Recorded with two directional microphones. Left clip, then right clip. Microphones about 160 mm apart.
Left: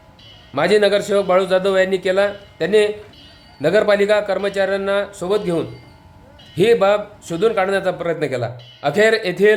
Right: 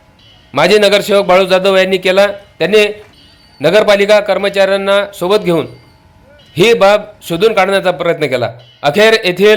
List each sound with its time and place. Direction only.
0.5 s a man's voice: 20° right (ahead or behind)
6.5 s a man's voice: 20° right (ahead or behind)